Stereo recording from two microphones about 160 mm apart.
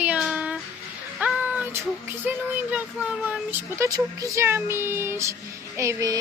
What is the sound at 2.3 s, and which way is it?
A child's voice, 10° right (ahead or behind).